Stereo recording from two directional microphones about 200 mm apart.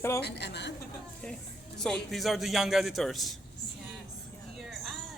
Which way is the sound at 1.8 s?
Centre (ahead or behind).